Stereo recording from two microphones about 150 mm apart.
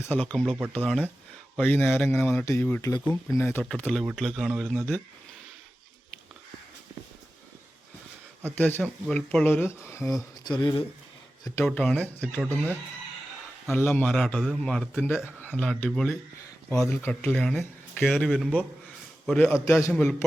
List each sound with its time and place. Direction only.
0.0 s a man's voice: 10° left (ahead or behind)
8.5 s a man's voice: 10° left (ahead or behind)
10.4 s speech: 30° left (ahead or behind)
11.6 s a man's voice: 10° left (ahead or behind)
19.6 s a man's voice: 20° left (ahead or behind)